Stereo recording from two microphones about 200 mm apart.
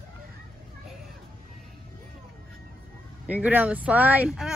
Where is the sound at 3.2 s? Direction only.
10° right (ahead or behind).